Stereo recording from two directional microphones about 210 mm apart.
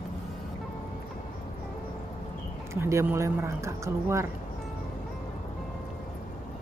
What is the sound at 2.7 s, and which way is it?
Speech, 10° right (ahead or behind).